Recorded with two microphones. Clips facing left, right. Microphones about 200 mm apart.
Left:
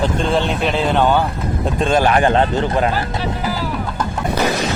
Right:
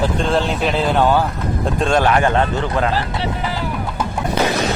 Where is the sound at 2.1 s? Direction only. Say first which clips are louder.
Left 2 dB; 30° left (ahead or behind).